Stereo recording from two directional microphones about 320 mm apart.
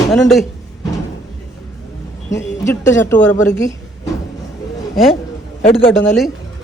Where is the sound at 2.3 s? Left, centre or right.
Centre.